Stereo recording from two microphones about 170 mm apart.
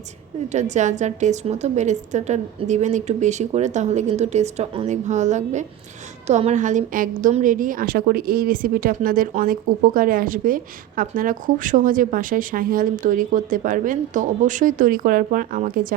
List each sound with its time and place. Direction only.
0.5 s a woman's voice: 45° right (ahead or behind)